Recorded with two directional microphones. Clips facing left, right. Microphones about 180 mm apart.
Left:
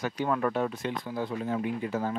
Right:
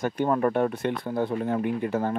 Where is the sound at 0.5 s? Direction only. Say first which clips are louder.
Right 5 dB; 55° right (ahead or behind).